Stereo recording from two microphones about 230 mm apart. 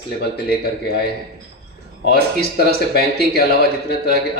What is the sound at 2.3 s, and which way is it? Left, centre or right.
A man's voice, left.